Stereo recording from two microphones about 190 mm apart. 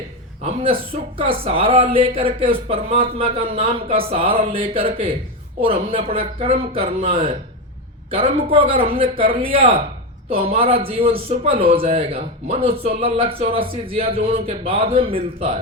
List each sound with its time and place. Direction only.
0.4 s a man's voice: 30° right (ahead or behind)